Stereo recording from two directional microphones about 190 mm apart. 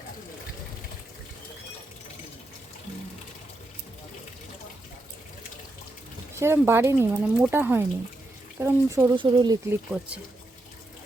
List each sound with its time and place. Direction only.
6.4 s speech: 15° right (ahead or behind)